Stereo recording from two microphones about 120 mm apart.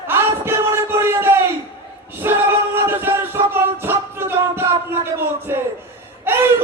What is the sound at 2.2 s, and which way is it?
Music, 20° right (ahead or behind).